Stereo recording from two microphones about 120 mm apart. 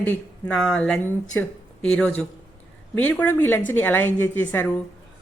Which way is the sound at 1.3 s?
20° left (ahead or behind).